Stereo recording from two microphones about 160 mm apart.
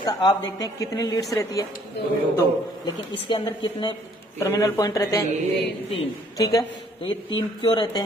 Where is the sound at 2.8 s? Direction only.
25° left (ahead or behind).